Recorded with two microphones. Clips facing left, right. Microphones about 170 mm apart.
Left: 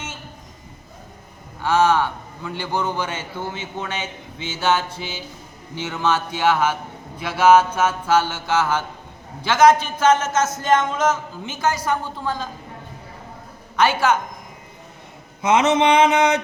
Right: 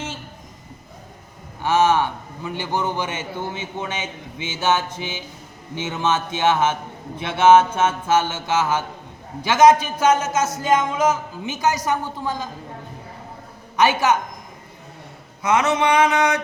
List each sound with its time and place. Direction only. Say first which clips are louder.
1.6 s a man's voice: even; 20° right (ahead or behind)
4.6 s mantra: even; 20° right (ahead or behind)
9.4 s a man's voice: right 1 dB; 15° right (ahead or behind)
13.7 s a man's voice: even; 15° right (ahead or behind)
15.4 s mantra: left 2 dB; 20° left (ahead or behind)